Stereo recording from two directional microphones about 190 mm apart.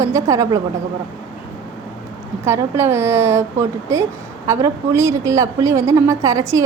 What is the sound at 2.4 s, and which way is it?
A woman's voice, 15° right (ahead or behind).